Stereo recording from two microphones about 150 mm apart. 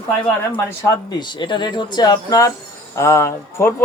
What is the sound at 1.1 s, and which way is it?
Speech, 30° left (ahead or behind).